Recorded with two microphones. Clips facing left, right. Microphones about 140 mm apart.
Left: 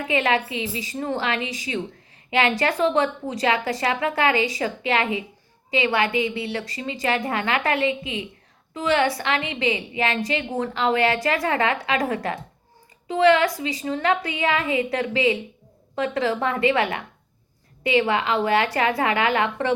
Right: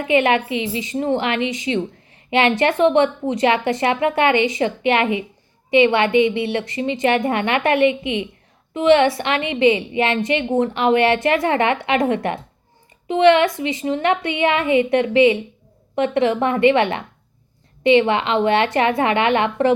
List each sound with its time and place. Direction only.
0.0 s a woman's voice: 25° right (ahead or behind)